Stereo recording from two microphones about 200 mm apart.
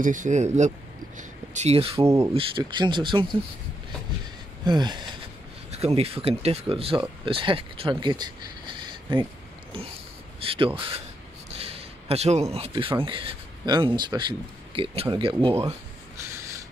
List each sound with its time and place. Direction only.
0.0 s speech: 40° right (ahead or behind)
2.0 s speech: 15° right (ahead or behind)
4.6 s speech: 20° right (ahead or behind)
5.7 s speech: 30° right (ahead or behind)
10.4 s speech: 25° right (ahead or behind)
11.5 s a sound: 30° right (ahead or behind)
12.5 s speech: 30° right (ahead or behind)